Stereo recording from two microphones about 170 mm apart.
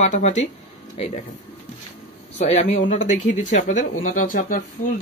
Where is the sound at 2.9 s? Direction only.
40° left (ahead or behind).